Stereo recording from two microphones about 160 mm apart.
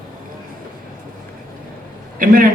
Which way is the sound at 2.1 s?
60° right (ahead or behind).